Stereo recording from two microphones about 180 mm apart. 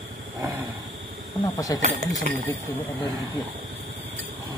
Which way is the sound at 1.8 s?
40° right (ahead or behind).